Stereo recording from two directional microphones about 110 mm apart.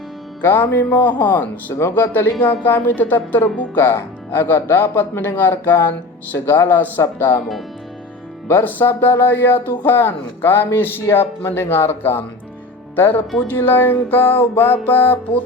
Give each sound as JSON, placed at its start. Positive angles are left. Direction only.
{"t": 0.4, "sound": "speech", "side_deg": 20}
{"t": 8.4, "sound": "speech", "side_deg": 20}
{"t": 13.0, "sound": "music", "side_deg": 15}